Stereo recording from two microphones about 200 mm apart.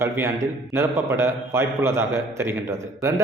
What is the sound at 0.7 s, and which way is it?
A man's voice, 15° right (ahead or behind).